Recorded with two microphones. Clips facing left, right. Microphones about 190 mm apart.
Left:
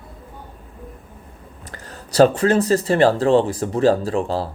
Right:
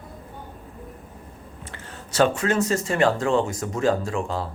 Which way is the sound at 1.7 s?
40° left (ahead or behind).